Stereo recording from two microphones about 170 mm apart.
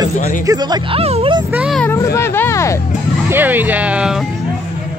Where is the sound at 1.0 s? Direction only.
35° right (ahead or behind).